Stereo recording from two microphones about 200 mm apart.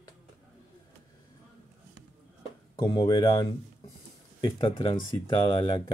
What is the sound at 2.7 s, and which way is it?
Speech, 20° left (ahead or behind).